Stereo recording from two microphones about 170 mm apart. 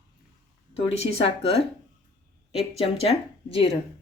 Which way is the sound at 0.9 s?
35° left (ahead or behind).